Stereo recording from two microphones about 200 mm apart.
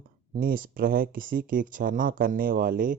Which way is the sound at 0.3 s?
45° right (ahead or behind).